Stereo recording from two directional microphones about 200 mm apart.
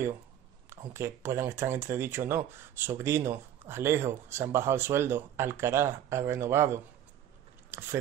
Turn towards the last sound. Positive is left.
turn(degrees=-15)  # may be behind; listen again after turning